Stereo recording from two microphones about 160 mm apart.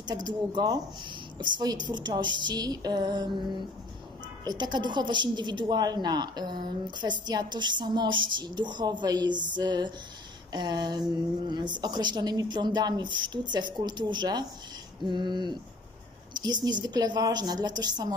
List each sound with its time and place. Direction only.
0.0 s a woman's voice: 25° right (ahead or behind)
4.5 s a woman's voice: 25° right (ahead or behind)